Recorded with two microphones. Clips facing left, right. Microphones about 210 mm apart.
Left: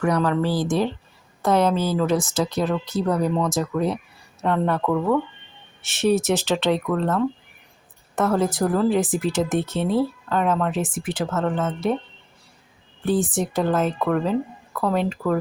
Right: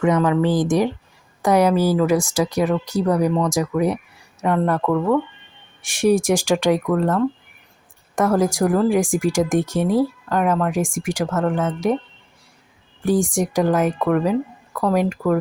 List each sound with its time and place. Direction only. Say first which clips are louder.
0.3 s speech: right 4 dB; 20° right (ahead or behind); by 5.2 s centre (ahead or behind)
5.8 s speech: right 3 dB; 15° right (ahead or behind)
8.1 s speech: right 3 dB; 10° right (ahead or behind)
13.1 s speech: right 3 dB; 10° right (ahead or behind)